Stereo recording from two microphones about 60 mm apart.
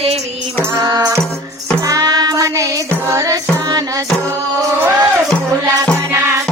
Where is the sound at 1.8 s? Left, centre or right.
Right.